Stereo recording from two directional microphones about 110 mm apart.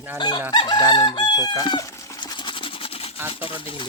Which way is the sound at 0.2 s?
45° left (ahead or behind).